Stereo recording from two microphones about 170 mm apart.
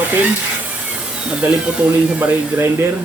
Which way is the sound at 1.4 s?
10° right (ahead or behind).